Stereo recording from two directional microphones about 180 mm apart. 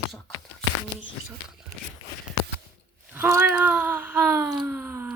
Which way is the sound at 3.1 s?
10° right (ahead or behind).